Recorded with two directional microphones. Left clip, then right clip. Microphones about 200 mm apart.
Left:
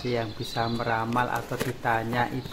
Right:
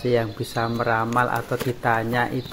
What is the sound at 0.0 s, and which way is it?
Speech, 10° right (ahead or behind).